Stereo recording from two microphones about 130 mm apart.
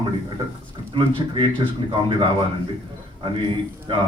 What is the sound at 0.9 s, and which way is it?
Speech, 40° right (ahead or behind).